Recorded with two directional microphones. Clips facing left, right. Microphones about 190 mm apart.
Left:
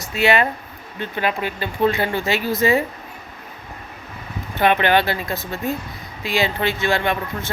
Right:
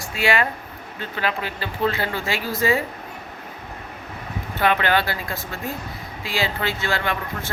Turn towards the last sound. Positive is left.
turn(degrees=20)  # may be behind; listen again after turning